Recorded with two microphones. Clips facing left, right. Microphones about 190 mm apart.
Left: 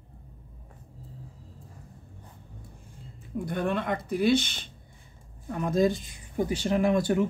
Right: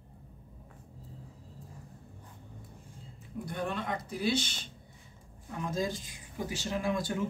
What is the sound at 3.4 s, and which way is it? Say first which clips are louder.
Speech: left 6 dB; 60° left (ahead or behind).